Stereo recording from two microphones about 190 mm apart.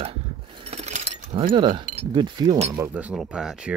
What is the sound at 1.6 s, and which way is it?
Speech, 25° right (ahead or behind).